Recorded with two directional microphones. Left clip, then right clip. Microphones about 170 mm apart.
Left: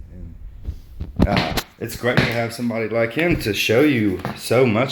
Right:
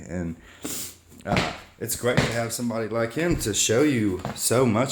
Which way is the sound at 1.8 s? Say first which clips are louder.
Left 3 dB; 10° right (ahead or behind).